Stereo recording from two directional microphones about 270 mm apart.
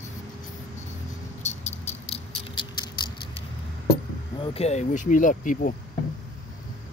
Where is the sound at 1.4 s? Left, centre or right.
Left.